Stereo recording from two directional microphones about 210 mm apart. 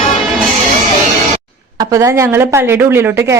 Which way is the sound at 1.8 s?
15° right (ahead or behind).